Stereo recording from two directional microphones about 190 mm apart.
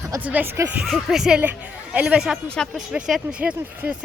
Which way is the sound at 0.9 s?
Centre (ahead or behind).